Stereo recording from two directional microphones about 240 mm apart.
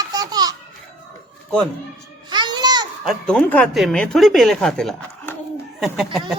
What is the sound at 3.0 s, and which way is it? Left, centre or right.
Speech, centre.